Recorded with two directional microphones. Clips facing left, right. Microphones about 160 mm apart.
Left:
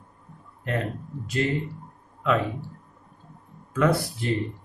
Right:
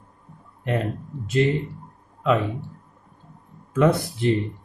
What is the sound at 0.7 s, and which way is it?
Speech, 20° right (ahead or behind).